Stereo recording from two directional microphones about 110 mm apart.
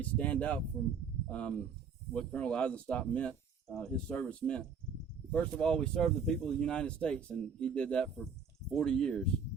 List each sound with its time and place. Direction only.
0.0 s speech: 10° left (ahead or behind)